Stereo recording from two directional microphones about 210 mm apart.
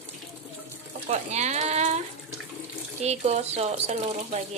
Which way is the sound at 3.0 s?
30° right (ahead or behind).